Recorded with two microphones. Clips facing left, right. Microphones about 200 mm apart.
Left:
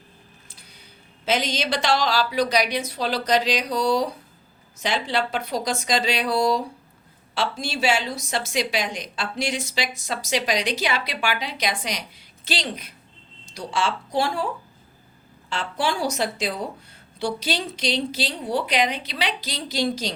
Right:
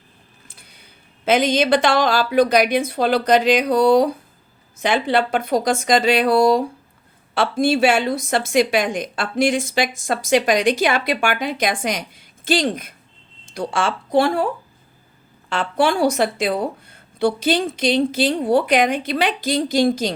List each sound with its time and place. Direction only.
1.2 s a woman's voice: 55° right (ahead or behind)
15.4 s a woman's voice: 55° right (ahead or behind)